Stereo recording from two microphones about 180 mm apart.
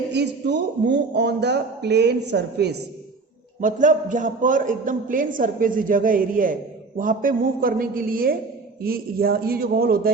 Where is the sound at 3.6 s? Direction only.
45° right (ahead or behind).